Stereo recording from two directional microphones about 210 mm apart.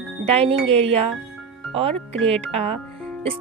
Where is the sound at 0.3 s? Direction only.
30° right (ahead or behind).